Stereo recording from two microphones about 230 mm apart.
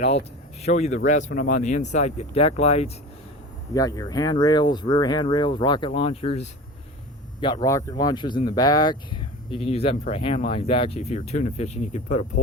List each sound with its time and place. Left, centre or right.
0.6 s speech: left
3.8 s speech: centre; by 12.2 s left